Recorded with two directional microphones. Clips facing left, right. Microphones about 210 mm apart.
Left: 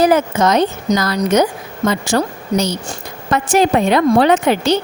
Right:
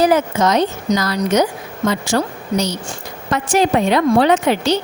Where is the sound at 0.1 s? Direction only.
50° left (ahead or behind).